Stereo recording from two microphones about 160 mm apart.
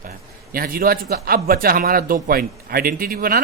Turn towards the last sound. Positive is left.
turn(degrees=-70)  # may be behind; listen again after turning